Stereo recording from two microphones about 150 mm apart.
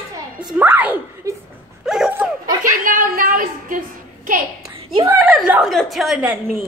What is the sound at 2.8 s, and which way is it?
A woman's voice, 65° right (ahead or behind).